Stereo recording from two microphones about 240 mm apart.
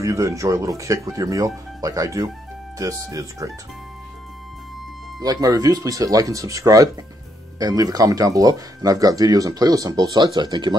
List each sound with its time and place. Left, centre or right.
0.0 s speech: centre
5.2 s speech: centre